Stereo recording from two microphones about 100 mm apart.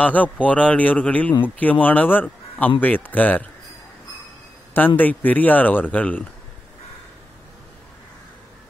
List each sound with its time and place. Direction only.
0.0 s speech: 15° left (ahead or behind)
4.7 s speech: 20° left (ahead or behind)